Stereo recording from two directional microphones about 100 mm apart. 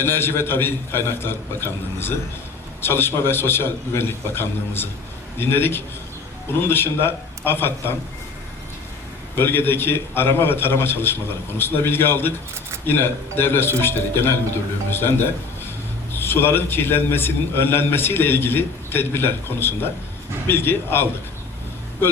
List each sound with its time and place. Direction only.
0.0 s a man's voice: 20° left (ahead or behind)
9.3 s a man's voice: 20° left (ahead or behind)